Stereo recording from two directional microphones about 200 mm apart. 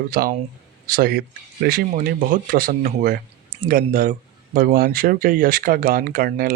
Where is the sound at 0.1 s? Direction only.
45° right (ahead or behind).